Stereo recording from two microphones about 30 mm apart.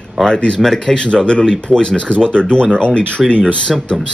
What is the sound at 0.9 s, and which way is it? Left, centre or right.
Speech, centre.